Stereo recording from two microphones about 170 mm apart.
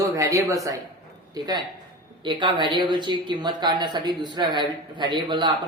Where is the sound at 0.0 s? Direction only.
20° right (ahead or behind).